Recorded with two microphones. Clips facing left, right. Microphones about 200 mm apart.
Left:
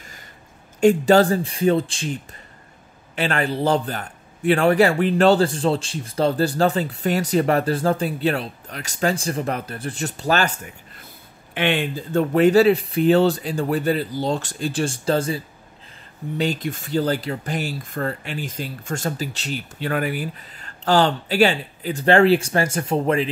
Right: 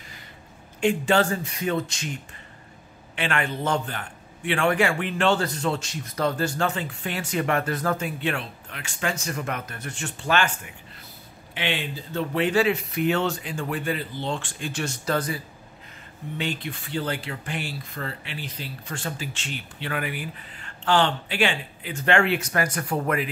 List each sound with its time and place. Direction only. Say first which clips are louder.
0.7 s a man's voice: left 7 dB; 40° left (ahead or behind)
3.2 s a man's voice: left 5 dB; 35° left (ahead or behind)
11.5 s a man's voice: left 7 dB; 55° left (ahead or behind); by 15.4 s 25° left (ahead or behind)
16.3 s a man's voice: left 7 dB; 40° left (ahead or behind)